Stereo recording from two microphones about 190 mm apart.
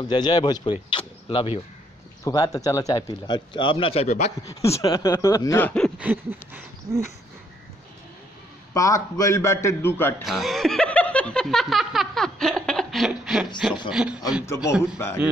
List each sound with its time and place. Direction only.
0.1 s speech: 20° left (ahead or behind)
4.5 s a man's voice: 15° left (ahead or behind)
5.9 s a sound: 10° right (ahead or behind)
8.7 s a man's voice: 15° left (ahead or behind)
10.2 s a sound: centre (ahead or behind)
14.0 s a man's voice: 5° right (ahead or behind)
14.4 s a man's voice: 15° left (ahead or behind)